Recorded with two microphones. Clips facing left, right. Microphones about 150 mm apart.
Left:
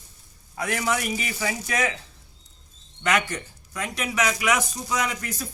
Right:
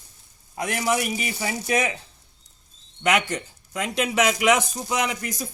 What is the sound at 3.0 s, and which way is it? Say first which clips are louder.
Speech: right 2 dB; 20° right (ahead or behind).